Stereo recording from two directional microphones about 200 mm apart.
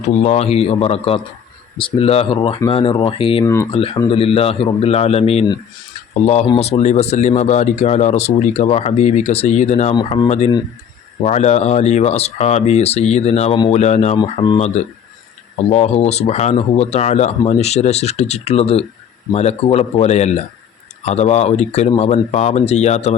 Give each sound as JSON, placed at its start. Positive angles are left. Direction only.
{"t": 0.0, "sound": "a man's voice", "side_deg": 35}
{"t": 3.4, "sound": "speech", "side_deg": 15}
{"t": 3.7, "sound": "a man's voice", "side_deg": 30}
{"t": 9.9, "sound": "a man's voice", "side_deg": 20}
{"t": 10.2, "sound": "speech", "side_deg": 35}